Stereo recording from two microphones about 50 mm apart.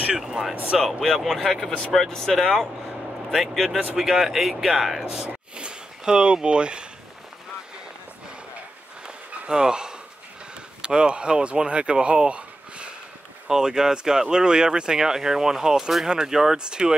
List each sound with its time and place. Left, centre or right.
0.2 s speech: centre
3.9 s speech: centre
5.6 s speech: centre
9.0 s a sound: centre
10.8 s speech: centre